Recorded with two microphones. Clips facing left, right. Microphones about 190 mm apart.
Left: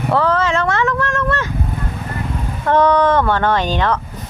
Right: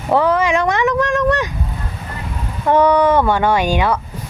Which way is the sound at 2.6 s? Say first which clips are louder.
Right 1 dB; 10° right (ahead or behind).